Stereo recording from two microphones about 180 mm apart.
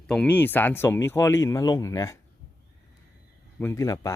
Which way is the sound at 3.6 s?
15° left (ahead or behind).